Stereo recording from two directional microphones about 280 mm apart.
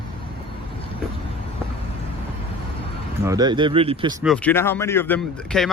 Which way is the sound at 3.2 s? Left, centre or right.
Centre.